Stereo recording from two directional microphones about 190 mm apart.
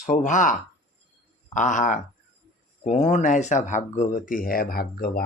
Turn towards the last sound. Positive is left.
turn(degrees=50)  # may be behind; listen again after turning